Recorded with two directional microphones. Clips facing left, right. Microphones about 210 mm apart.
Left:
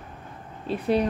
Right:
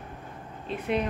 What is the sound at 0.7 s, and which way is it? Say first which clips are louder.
Speech: left 5 dB; 35° left (ahead or behind).